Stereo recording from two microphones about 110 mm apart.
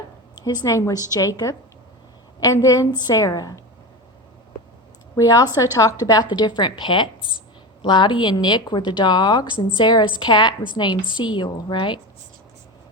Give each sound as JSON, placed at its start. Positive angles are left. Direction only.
{"t": 0.4, "sound": "a woman's voice", "side_deg": 30}
{"t": 5.1, "sound": "a woman's voice", "side_deg": 30}